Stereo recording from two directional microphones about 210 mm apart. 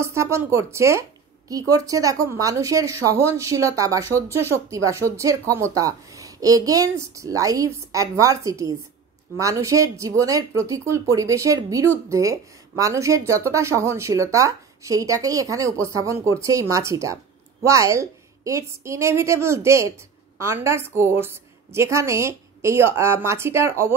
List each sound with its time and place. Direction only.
0.0 s speech: 15° right (ahead or behind)